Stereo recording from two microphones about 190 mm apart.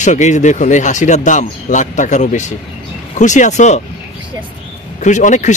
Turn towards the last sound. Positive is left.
turn(degrees=40)  # may be behind; listen again after turning